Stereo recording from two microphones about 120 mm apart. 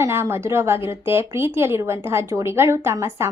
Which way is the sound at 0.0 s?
20° right (ahead or behind).